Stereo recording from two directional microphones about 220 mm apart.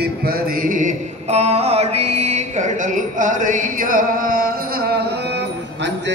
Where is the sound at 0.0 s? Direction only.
45° right (ahead or behind).